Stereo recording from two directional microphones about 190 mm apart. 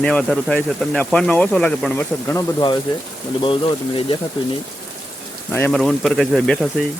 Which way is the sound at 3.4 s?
30° left (ahead or behind).